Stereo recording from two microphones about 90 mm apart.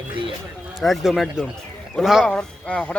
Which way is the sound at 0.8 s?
5° right (ahead or behind).